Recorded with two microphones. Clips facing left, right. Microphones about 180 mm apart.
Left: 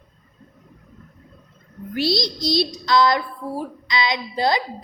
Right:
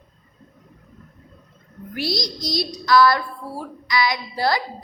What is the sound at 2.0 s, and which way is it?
A woman's voice, 25° left (ahead or behind).